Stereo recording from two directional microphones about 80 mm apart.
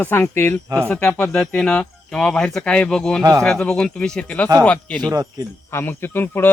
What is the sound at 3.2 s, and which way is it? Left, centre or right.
Speech, right.